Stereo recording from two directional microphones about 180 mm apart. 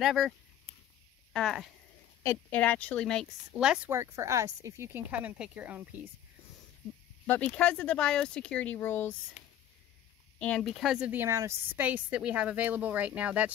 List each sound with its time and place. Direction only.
0.0 s speech: centre (ahead or behind)
1.3 s a woman's voice: centre (ahead or behind)
7.2 s speech: 5° left (ahead or behind)
9.4 s a sound: 40° left (ahead or behind)
10.4 s a woman's voice: 5° left (ahead or behind)